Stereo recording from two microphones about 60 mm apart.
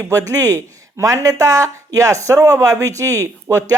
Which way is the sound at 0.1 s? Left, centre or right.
Right.